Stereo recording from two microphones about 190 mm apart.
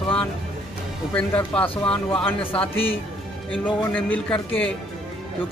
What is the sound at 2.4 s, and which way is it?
Speech, 30° left (ahead or behind).